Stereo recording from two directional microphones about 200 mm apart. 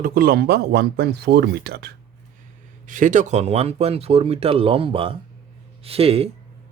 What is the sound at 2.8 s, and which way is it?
Speech, 40° right (ahead or behind).